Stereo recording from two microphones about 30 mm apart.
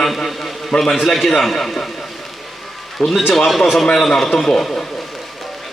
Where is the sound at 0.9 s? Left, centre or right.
Centre.